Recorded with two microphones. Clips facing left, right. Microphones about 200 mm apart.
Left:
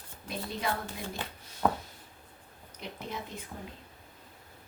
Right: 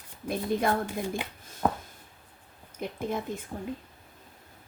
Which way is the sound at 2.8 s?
50° right (ahead or behind).